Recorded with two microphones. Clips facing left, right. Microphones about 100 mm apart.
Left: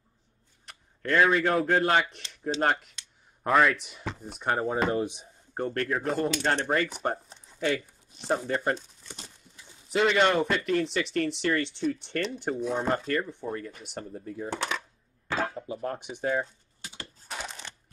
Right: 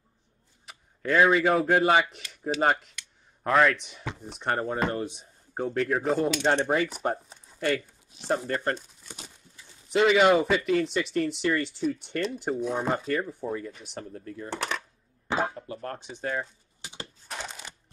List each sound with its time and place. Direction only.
0.7 s speech: 5° right (ahead or behind)
4.8 s speech: 15° left (ahead or behind)
5.5 s speech: 5° right (ahead or behind)
9.8 s speech: centre (ahead or behind)
14.5 s speech: centre (ahead or behind)
15.2 s chop: 20° right (ahead or behind)
15.5 s speech: 10° left (ahead or behind)
16.8 s a sound: 20° right (ahead or behind)
17.5 s a sound: 10° right (ahead or behind)